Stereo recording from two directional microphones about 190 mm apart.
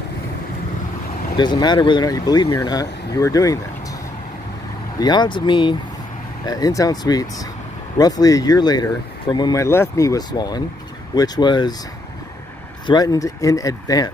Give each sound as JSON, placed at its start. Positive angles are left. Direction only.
{"t": 1.3, "sound": "speech", "side_deg": 25}
{"t": 4.9, "sound": "speech", "side_deg": 20}
{"t": 12.8, "sound": "speech", "side_deg": 20}